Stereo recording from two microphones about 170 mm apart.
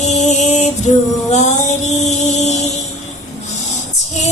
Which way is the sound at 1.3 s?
40° left (ahead or behind).